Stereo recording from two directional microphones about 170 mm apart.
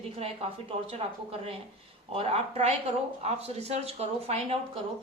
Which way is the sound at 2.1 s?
35° right (ahead or behind).